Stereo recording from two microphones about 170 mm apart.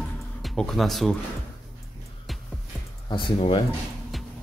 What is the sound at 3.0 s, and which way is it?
Speech, 30° left (ahead or behind).